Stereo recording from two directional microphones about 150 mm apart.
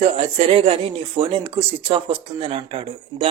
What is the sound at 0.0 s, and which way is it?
Speech, 40° right (ahead or behind).